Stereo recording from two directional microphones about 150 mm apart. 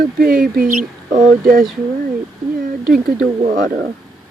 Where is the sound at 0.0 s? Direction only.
70° right (ahead or behind).